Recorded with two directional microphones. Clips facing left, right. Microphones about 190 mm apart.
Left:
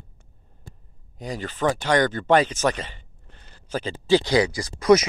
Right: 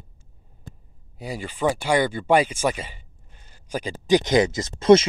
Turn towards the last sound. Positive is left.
turn(degrees=-25)  # may be behind; listen again after turning